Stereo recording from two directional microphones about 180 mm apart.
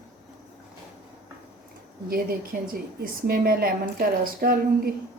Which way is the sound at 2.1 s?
55° right (ahead or behind).